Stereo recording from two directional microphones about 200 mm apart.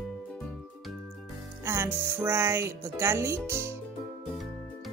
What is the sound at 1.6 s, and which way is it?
Speech, 10° right (ahead or behind).